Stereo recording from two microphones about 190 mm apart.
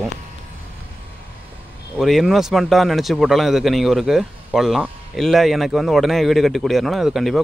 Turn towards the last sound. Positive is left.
turn(degrees=0)  # may be behind; listen again after turning